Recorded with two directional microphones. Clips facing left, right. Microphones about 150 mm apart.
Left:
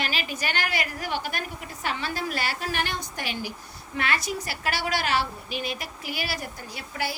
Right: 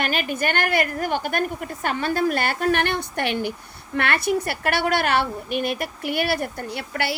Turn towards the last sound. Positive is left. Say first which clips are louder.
# right 5 dB
turn(degrees=-65)  # may be behind; listen again after turning